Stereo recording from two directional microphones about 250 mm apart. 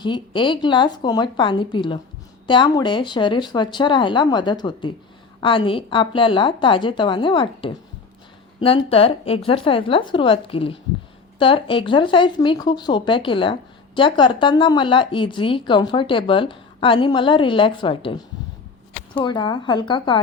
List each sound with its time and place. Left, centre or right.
0.0 s speech: centre